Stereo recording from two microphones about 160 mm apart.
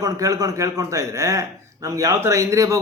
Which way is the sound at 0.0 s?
20° right (ahead or behind).